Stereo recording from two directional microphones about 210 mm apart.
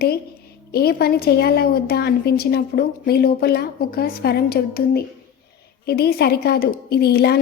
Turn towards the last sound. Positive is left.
turn(degrees=50)  # may be behind; listen again after turning